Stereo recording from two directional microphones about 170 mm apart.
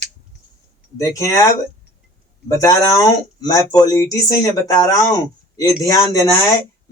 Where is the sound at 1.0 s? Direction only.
20° left (ahead or behind).